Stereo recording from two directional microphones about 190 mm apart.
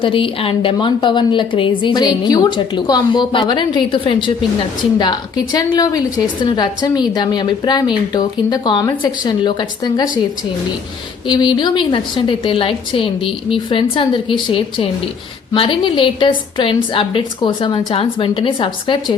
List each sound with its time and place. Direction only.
0.0 s a woman's voice: 25° left (ahead or behind)
11.3 s a woman's voice: 25° left (ahead or behind)